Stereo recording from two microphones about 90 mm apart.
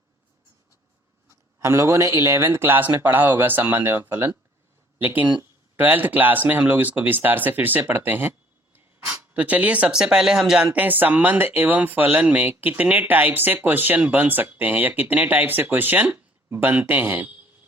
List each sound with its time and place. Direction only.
1.5 s speech: 30° right (ahead or behind); by 10.7 s 5° right (ahead or behind)
10.8 s speech: 20° right (ahead or behind)